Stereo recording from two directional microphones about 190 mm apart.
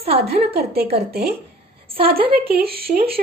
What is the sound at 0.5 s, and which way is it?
Speech, 55° right (ahead or behind).